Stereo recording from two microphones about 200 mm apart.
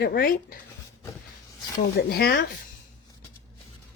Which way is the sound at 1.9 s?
50° left (ahead or behind).